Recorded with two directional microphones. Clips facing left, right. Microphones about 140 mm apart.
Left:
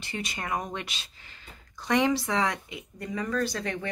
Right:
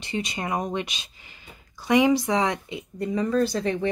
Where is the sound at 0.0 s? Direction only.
20° right (ahead or behind).